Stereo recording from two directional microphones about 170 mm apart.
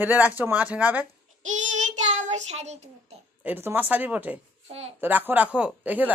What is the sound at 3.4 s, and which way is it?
Speech, 10° right (ahead or behind).